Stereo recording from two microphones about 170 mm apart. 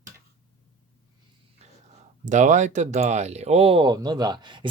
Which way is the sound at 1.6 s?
40° right (ahead or behind).